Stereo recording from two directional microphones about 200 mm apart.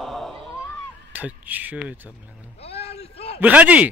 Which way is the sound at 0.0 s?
Centre (ahead or behind).